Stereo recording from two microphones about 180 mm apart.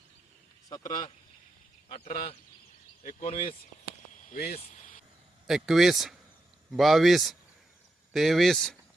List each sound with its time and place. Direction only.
0.7 s speech: 25° left (ahead or behind)
1.9 s speech: 40° left (ahead or behind)
4.3 s speech: 55° left (ahead or behind)
4.5 s speech: 40° left (ahead or behind)
5.5 s speech: centre (ahead or behind)